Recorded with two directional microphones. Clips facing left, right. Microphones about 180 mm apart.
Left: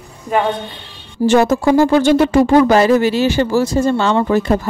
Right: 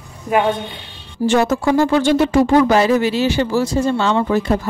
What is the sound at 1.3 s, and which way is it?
A woman's voice, 35° left (ahead or behind).